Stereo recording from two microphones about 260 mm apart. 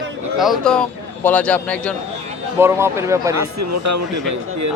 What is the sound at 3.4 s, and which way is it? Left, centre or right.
A man's voice, right.